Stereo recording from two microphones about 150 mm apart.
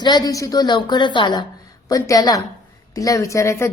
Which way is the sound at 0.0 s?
30° left (ahead or behind).